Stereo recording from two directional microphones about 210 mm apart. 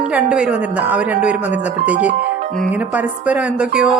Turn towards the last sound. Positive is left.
turn(degrees=-5)  # may be behind; listen again after turning